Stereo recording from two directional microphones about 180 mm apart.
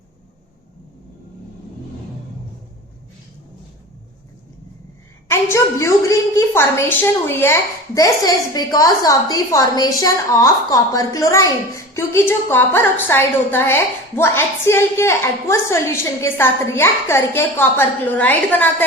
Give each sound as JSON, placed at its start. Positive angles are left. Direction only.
{"t": 5.3, "sound": "a woman's voice", "side_deg": 15}